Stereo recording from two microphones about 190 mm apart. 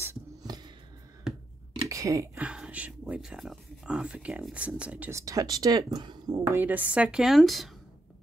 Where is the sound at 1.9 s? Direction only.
15° right (ahead or behind).